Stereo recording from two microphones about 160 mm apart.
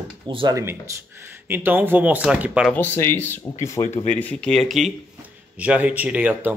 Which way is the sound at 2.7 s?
10° left (ahead or behind).